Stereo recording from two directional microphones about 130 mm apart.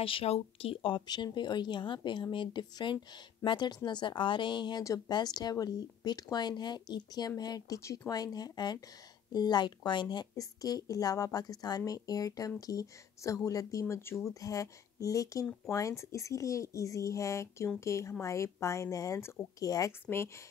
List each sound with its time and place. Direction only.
0.0 s a woman's voice: 45° left (ahead or behind); by 20.2 s 20° left (ahead or behind)